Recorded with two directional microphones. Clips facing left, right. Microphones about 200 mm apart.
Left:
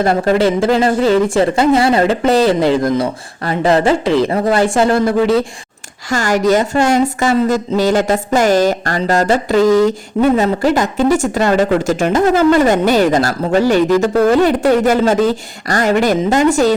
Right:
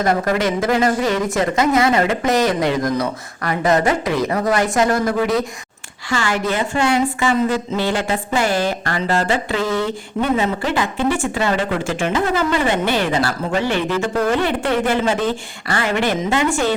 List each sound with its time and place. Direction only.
0.0 s speech: 30° left (ahead or behind)
6.1 s a woman's voice: 40° left (ahead or behind)